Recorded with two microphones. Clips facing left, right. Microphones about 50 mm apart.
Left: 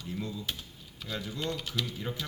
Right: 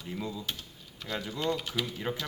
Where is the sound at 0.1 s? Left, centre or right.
Right.